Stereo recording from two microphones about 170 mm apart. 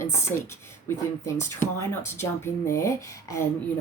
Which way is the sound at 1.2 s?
15° left (ahead or behind).